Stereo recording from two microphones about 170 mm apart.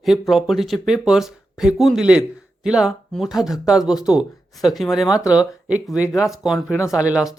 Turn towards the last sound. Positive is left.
turn(degrees=-5)  # may be behind; listen again after turning